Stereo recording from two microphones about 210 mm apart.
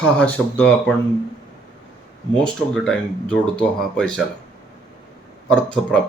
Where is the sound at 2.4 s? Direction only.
5° left (ahead or behind).